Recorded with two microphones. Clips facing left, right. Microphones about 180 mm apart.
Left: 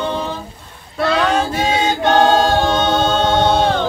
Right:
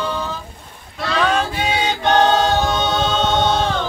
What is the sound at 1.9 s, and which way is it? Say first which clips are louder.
A capella: left 2 dB; 50° left (ahead or behind).